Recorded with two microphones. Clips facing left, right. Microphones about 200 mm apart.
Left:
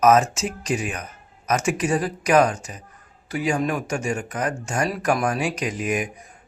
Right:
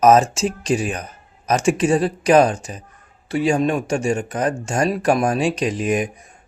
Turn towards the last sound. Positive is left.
turn(degrees=-30)  # may be behind; listen again after turning